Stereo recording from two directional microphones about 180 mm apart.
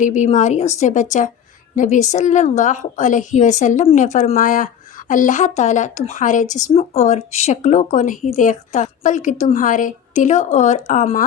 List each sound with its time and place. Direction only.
0.0 s a woman's voice: 45° left (ahead or behind)